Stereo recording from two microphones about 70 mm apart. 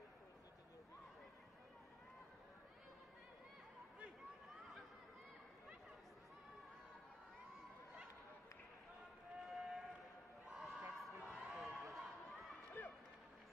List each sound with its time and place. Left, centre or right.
9.5 s run: centre
10.5 s a sound: centre
12.8 s run: left